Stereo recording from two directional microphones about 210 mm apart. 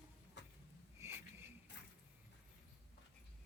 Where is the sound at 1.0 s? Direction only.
10° right (ahead or behind).